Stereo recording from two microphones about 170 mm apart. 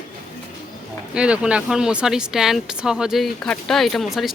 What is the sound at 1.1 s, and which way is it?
Speech, 5° right (ahead or behind).